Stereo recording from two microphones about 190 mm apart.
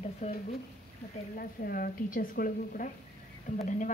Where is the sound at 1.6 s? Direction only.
50° left (ahead or behind).